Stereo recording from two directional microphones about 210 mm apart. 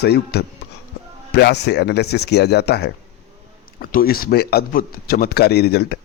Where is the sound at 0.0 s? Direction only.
50° left (ahead or behind).